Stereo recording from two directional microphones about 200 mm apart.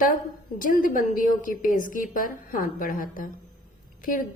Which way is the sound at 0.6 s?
40° left (ahead or behind).